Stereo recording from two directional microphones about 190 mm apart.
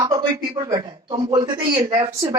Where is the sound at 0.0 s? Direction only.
15° right (ahead or behind).